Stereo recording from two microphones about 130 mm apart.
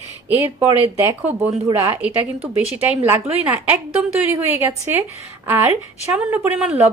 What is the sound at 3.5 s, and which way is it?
A woman's voice, 15° right (ahead or behind).